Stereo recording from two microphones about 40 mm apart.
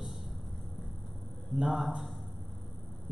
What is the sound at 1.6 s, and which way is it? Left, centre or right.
Speech, centre.